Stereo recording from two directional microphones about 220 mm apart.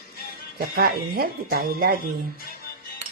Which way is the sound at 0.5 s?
45° right (ahead or behind).